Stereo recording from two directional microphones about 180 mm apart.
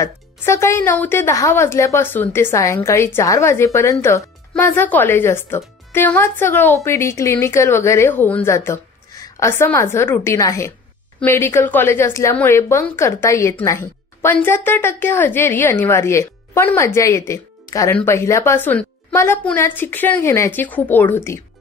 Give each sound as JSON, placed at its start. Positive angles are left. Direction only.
{"t": 0.0, "sound": "a woman's voice", "side_deg": 15}